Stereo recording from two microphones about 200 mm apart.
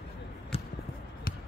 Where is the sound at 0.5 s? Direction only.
30° left (ahead or behind).